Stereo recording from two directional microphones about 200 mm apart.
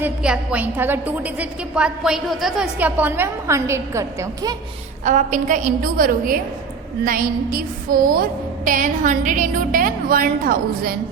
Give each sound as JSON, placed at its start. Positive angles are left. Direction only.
{"t": 0.0, "sound": "a woman's voice", "side_deg": -5}
{"t": 5.0, "sound": "a woman's voice", "side_deg": -40}
{"t": 7.0, "sound": "music", "side_deg": -45}